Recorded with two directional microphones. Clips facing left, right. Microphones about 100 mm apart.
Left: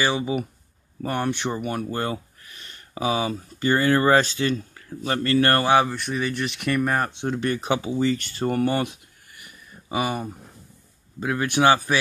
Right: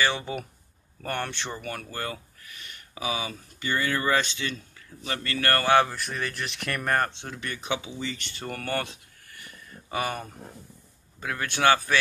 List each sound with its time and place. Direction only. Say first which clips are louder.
0.0 s speech: left 4 dB; 10° left (ahead or behind); by 5.7 s 25° left (ahead or behind)
5.9 s speech: left 6 dB; centre (ahead or behind)
7.2 s speech: left 8 dB; 35° left (ahead or behind)
8.5 s speech: left 11 dB; 25° left (ahead or behind)
8.7 s a sound: left 5 dB; 15° left (ahead or behind)
11.1 s speech: left 7 dB; 15° left (ahead or behind)